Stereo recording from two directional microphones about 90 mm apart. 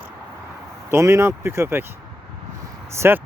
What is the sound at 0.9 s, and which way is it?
Speech, 35° right (ahead or behind).